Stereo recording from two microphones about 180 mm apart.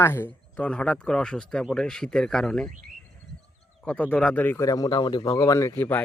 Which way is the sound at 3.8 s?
10° left (ahead or behind).